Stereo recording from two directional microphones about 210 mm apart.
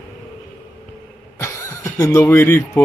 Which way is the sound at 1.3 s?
15° left (ahead or behind).